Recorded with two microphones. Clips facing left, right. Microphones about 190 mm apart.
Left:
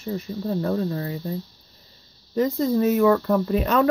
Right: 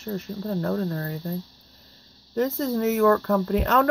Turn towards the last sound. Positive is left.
turn(degrees=15)  # may be behind; listen again after turning